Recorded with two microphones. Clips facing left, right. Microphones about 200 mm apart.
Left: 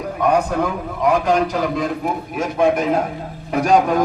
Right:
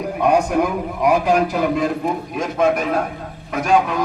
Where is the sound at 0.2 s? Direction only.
10° right (ahead or behind).